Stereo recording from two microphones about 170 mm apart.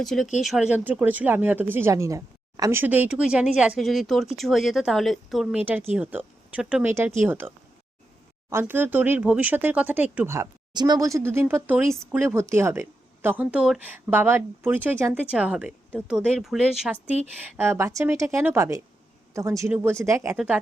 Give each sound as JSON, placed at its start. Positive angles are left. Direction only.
{"t": 0.0, "sound": "speech", "side_deg": 0}
{"t": 20.3, "sound": "speech", "side_deg": -5}